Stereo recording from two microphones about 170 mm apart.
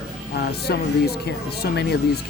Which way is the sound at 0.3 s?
70° left (ahead or behind).